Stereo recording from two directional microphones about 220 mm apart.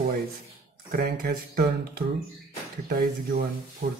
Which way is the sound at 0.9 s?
40° right (ahead or behind).